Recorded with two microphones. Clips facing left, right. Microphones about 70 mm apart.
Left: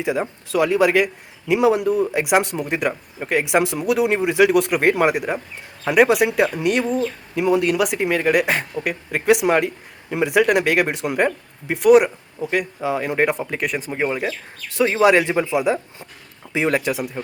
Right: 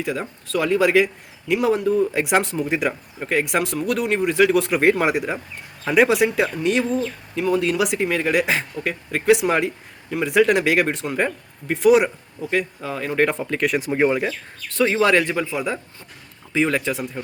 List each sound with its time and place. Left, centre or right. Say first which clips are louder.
0.0 s speech: left 4 dB; centre
7.0 s speech: left 3 dB; centre
7.6 s speech: left 1 dB; centre
13.7 s speech: right 5 dB; centre
14.7 s speech: left 2 dB; centre
15.6 s speech: left 6 dB; centre